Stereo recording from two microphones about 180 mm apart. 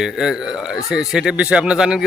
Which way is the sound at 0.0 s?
Centre (ahead or behind).